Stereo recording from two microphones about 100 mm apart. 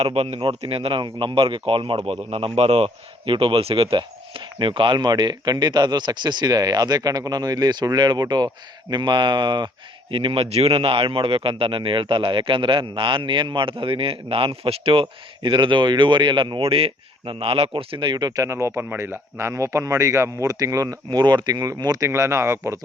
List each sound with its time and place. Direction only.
0.0 s speech: 90° right
0.3 s speech: 65° right (ahead or behind)
10.1 s a man's voice: 60° right (ahead or behind)
15.4 s a man's voice: 55° right (ahead or behind); by 22.8 s 25° right (ahead or behind)